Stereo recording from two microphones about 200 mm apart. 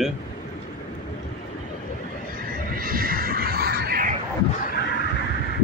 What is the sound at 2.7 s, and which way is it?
Neigh, 45° right (ahead or behind).